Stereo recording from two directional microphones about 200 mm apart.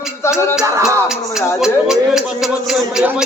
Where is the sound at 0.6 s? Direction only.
15° right (ahead or behind).